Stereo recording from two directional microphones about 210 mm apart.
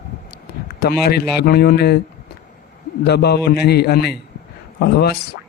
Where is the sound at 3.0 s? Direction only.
50° left (ahead or behind).